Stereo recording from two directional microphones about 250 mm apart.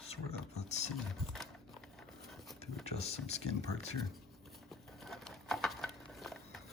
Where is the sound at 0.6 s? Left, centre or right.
Left.